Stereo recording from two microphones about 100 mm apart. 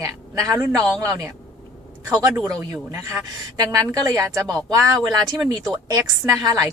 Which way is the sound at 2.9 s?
30° right (ahead or behind).